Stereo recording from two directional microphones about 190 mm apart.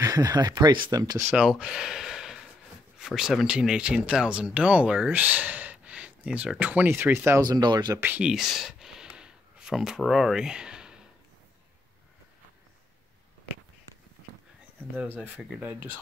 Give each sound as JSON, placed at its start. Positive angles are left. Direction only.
{"t": 0.0, "sound": "speech", "side_deg": -20}
{"t": 1.3, "sound": "speech", "side_deg": -5}
{"t": 15.0, "sound": "speech", "side_deg": -10}